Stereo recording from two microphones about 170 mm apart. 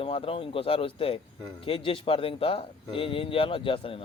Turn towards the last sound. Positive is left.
turn(degrees=30)  # may be behind; listen again after turning